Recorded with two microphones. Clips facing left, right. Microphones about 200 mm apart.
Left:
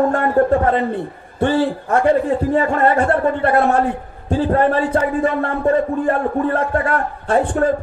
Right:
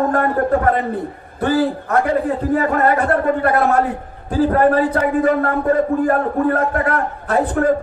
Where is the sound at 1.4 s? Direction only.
25° left (ahead or behind).